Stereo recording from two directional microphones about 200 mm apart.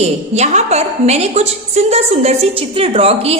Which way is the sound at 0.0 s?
35° right (ahead or behind).